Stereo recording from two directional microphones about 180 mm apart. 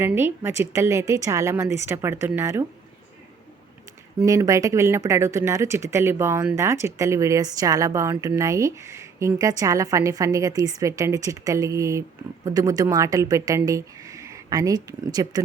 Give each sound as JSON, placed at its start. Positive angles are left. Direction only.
{"t": 0.0, "sound": "speech", "side_deg": -10}
{"t": 4.3, "sound": "a woman's voice", "side_deg": -20}